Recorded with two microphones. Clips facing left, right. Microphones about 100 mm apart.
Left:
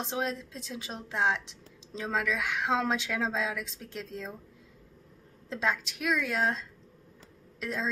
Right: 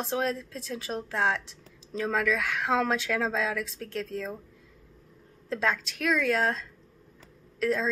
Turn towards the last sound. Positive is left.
turn(degrees=20)  # may be behind; listen again after turning